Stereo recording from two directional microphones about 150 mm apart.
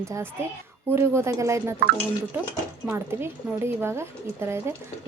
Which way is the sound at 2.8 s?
15° right (ahead or behind).